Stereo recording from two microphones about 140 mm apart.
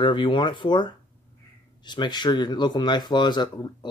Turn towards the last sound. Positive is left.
turn(degrees=30)  # may be behind; listen again after turning